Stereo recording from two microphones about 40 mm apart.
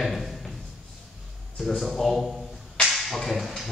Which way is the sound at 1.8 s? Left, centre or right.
Centre.